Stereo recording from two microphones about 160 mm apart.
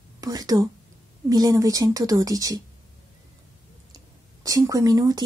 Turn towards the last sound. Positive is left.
turn(degrees=-25)  # may be behind; listen again after turning